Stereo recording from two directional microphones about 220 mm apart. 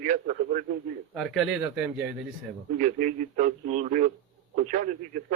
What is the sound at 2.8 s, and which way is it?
A man's voice, 35° right (ahead or behind).